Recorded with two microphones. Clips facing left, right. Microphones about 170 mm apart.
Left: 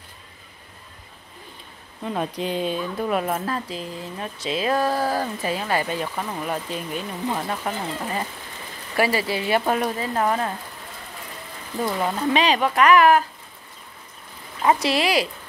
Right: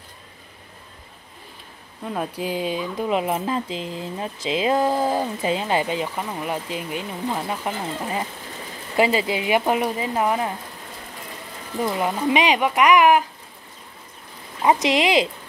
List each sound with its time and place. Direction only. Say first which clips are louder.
2.0 s speech: left 1 dB; 5° right (ahead or behind)
11.8 s speech: right 1 dB; 15° right (ahead or behind)
14.6 s speech: right 2 dB; 20° right (ahead or behind)